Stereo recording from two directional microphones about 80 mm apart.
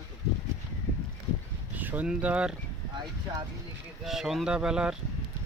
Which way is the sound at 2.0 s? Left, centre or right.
Centre.